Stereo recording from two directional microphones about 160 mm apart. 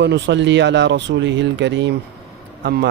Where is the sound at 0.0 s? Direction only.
90° right.